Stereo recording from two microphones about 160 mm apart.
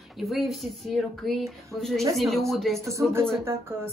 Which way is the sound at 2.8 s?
20° right (ahead or behind).